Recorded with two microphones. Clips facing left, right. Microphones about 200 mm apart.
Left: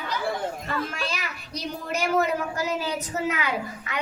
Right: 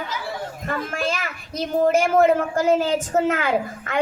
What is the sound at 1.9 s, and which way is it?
A woman's voice, 50° right (ahead or behind).